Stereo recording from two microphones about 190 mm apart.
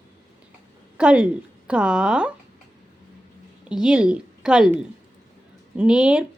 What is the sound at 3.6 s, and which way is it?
A woman's voice, 5° right (ahead or behind).